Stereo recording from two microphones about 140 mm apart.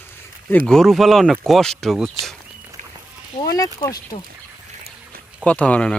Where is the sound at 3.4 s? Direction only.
25° left (ahead or behind).